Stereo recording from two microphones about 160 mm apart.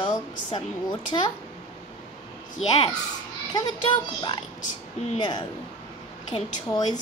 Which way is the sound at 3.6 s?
30° left (ahead or behind).